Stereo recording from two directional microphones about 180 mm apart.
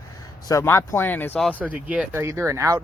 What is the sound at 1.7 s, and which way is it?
Speech, 10° right (ahead or behind).